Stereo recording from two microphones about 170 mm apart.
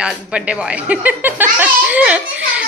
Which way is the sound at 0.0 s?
5° right (ahead or behind).